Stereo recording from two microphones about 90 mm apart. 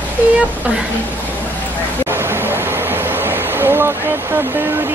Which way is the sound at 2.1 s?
25° right (ahead or behind).